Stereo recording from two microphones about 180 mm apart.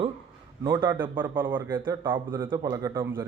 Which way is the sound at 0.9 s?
10° right (ahead or behind).